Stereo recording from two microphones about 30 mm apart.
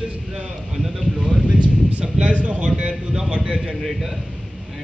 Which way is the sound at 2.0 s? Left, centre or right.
Right.